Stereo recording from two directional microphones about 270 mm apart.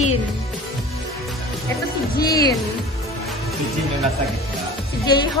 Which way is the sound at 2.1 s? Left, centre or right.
Centre.